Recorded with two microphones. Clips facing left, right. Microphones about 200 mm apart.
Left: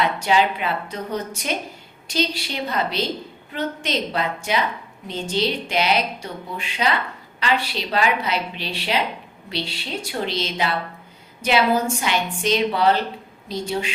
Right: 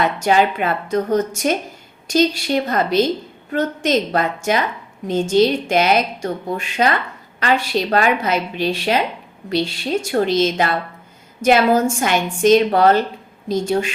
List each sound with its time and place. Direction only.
0.0 s a woman's voice: 50° right (ahead or behind)